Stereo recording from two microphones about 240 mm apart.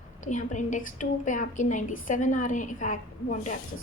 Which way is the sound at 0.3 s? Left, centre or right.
Left.